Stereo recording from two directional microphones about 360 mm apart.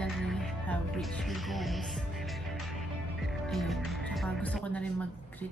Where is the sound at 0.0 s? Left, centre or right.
Centre.